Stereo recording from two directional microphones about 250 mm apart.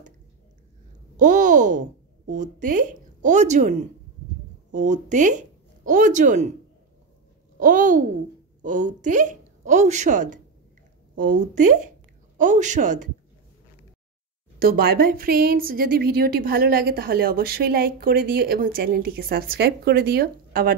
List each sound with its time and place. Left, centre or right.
1.1 s speech: right
4.7 s speech: right
7.5 s speech: right
9.0 s a woman's voice: right
14.6 s a woman's voice: right